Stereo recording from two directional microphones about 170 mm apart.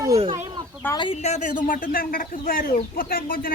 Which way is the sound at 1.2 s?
45° left (ahead or behind).